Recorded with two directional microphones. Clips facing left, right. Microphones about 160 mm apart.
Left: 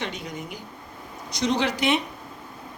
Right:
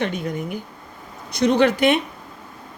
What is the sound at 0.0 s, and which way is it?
A woman's voice, 55° right (ahead or behind).